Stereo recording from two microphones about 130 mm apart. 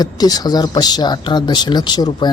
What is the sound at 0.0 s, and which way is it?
Speech, 30° left (ahead or behind).